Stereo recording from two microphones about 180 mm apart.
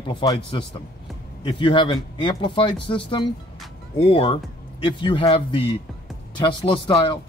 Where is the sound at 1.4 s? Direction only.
25° left (ahead or behind).